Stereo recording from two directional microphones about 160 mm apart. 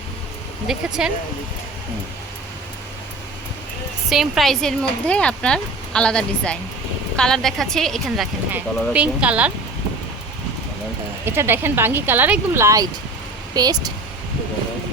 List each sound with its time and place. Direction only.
0.7 s speech: centre (ahead or behind)
4.1 s speech: centre (ahead or behind)
11.3 s speech: 15° right (ahead or behind)